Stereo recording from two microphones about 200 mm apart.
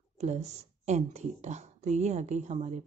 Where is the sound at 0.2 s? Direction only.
35° right (ahead or behind).